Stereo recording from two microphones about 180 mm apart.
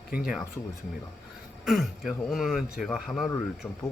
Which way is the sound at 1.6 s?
Centre (ahead or behind).